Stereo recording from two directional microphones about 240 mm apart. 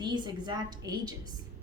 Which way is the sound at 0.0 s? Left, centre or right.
Centre.